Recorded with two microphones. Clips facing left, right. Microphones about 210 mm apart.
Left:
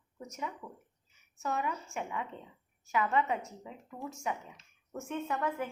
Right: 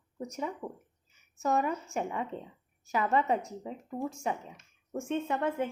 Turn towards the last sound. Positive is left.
turn(degrees=-30)  # may be behind; listen again after turning